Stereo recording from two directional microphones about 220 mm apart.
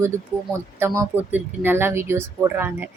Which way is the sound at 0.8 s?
10° right (ahead or behind).